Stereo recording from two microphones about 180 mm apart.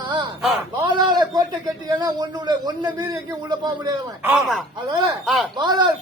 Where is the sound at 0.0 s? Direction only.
25° right (ahead or behind).